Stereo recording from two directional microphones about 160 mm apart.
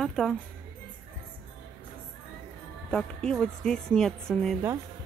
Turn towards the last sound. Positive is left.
turn(degrees=0)  # may be behind; listen again after turning